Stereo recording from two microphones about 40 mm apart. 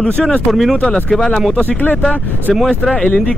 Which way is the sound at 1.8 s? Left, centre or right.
Left.